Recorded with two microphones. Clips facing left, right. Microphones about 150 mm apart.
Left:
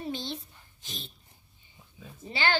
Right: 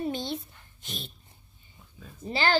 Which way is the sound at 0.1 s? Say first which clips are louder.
Right 3 dB; 55° right (ahead or behind).